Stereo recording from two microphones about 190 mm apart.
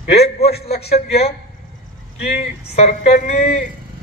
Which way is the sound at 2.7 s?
35° left (ahead or behind).